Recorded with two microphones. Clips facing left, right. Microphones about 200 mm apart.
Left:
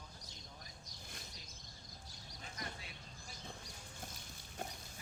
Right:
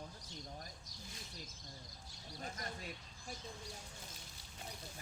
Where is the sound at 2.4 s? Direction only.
45° right (ahead or behind).